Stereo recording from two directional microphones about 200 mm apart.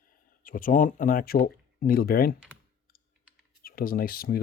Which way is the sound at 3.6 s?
45° left (ahead or behind).